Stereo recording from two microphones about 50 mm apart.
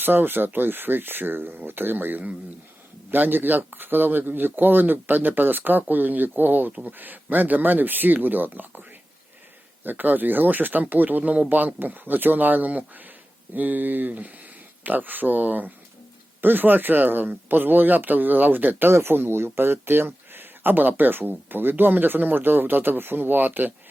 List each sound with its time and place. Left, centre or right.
0.0 s speech: right
9.8 s speech: right
18.9 s speech: right